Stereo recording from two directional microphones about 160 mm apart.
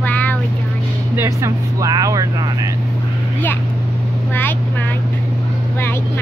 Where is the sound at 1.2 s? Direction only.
20° right (ahead or behind).